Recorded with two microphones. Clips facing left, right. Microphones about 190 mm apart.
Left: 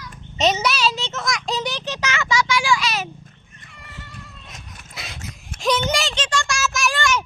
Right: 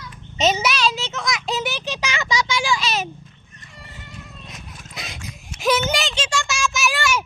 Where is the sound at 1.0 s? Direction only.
Centre (ahead or behind); by 3.1 s 25° right (ahead or behind).